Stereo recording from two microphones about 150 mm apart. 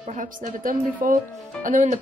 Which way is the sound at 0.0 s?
55° right (ahead or behind).